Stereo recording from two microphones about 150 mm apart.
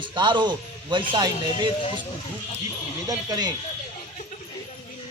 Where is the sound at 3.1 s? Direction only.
25° right (ahead or behind).